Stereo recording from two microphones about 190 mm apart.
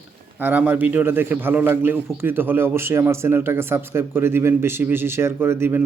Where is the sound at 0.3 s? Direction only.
10° right (ahead or behind).